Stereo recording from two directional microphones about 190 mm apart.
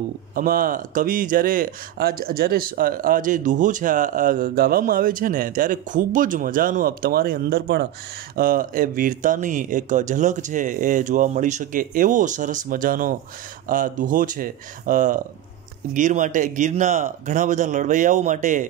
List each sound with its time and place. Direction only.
0.3 s speech: 45° right (ahead or behind)